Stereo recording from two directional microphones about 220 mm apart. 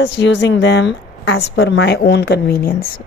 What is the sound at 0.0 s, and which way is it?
A woman's voice, 55° left (ahead or behind).